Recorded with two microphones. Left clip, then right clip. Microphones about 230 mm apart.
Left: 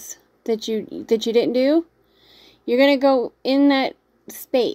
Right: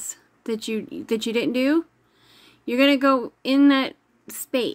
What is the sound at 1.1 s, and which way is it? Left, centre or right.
Speech, right.